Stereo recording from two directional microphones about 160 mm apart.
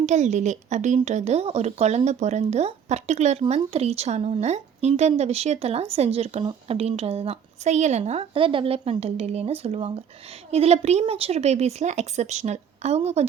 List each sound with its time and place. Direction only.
0.0 s a woman's voice: 45° right (ahead or behind)